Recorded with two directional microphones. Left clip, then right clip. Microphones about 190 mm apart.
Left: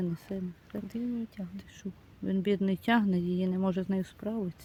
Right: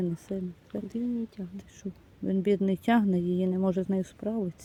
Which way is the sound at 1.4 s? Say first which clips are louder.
Right 2 dB; 75° left (ahead or behind).